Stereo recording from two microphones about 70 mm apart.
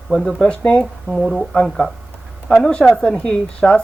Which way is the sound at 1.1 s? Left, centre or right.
Centre.